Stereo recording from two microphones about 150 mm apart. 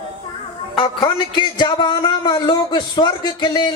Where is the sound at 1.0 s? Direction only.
30° left (ahead or behind).